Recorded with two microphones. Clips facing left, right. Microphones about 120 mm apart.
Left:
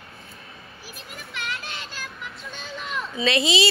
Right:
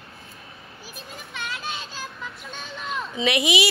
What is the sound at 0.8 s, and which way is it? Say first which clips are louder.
Children playing: right 1 dB; 20° right (ahead or behind).